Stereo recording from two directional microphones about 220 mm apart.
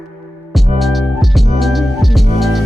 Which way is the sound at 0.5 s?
Centre (ahead or behind).